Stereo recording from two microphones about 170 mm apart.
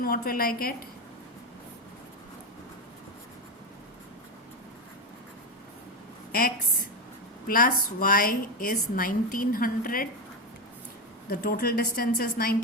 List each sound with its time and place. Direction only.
0.0 s a woman's voice: 60° left (ahead or behind)
7.4 s a woman's voice: 55° left (ahead or behind)
11.3 s a woman's voice: 60° left (ahead or behind)